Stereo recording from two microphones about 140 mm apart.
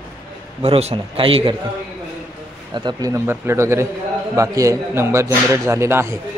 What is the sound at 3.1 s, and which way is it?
Speech, 20° right (ahead or behind).